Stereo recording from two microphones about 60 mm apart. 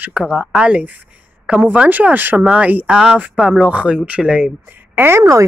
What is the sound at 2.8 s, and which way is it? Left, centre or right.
Speech, centre.